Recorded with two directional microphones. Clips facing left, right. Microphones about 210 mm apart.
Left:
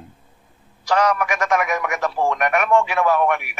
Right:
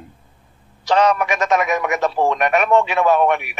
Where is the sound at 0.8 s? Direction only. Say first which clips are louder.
Right 3 dB; 25° right (ahead or behind).